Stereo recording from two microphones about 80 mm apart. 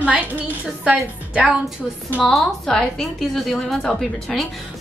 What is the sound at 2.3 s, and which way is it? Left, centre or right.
A woman's voice, centre.